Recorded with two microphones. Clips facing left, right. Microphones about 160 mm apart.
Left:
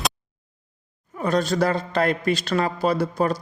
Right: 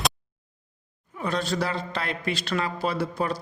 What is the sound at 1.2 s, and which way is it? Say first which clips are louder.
A man's voice: left 6 dB; 45° left (ahead or behind).